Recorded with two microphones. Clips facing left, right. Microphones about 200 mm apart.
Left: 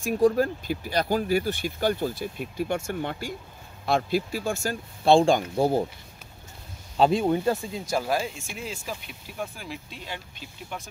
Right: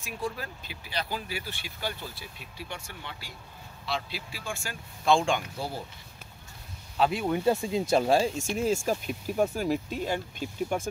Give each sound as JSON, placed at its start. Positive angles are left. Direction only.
{"t": 0.0, "sound": "speech", "side_deg": 45}
{"t": 7.0, "sound": "speech", "side_deg": 25}
{"t": 7.7, "sound": "speech", "side_deg": -25}
{"t": 8.5, "sound": "speech", "side_deg": -45}